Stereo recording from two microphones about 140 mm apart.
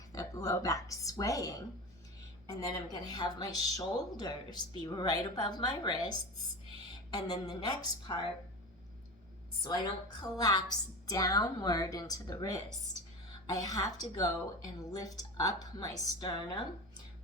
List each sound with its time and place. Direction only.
0.1 s a woman's voice: 25° left (ahead or behind)
9.6 s a woman's voice: 30° left (ahead or behind)